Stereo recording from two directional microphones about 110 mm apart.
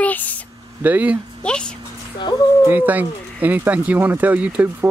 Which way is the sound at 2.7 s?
15° right (ahead or behind).